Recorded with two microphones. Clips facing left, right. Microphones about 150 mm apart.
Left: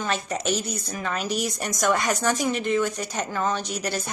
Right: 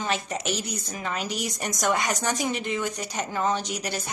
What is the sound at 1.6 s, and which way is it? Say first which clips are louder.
A woman's voice: left 1 dB; 15° right (ahead or behind).